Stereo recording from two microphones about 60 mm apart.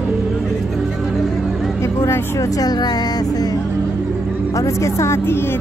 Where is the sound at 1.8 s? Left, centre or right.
Left.